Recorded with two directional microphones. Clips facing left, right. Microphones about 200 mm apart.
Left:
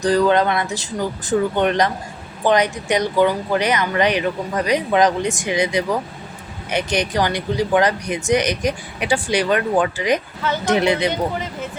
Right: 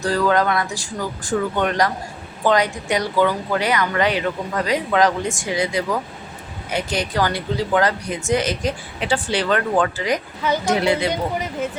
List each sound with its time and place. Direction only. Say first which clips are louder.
0.0 s speech: left 3 dB; 20° left (ahead or behind)